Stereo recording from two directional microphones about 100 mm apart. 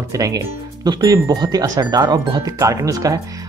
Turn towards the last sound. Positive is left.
turn(degrees=-35)  # may be behind; listen again after turning